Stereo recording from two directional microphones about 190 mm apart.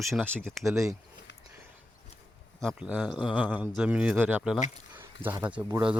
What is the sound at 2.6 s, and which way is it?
Speech, centre (ahead or behind).